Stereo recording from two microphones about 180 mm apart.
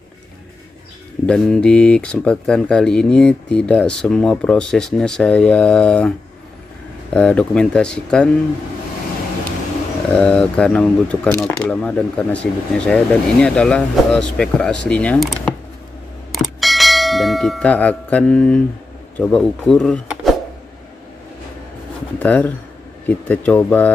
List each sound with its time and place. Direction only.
1.2 s speech: 5° left (ahead or behind)
10.1 s speech: 5° left (ahead or behind)
16.3 s bell: centre (ahead or behind)
19.1 s speech: 5° left (ahead or behind)
22.2 s speech: 10° left (ahead or behind)